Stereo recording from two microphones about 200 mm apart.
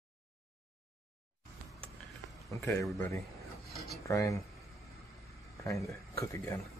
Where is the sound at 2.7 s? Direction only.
15° left (ahead or behind).